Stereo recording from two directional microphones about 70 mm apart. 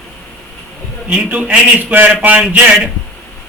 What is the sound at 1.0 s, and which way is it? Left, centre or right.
A man's voice, centre.